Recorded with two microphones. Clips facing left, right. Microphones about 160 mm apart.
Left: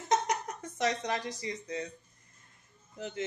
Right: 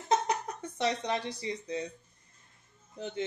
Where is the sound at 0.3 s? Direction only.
30° right (ahead or behind).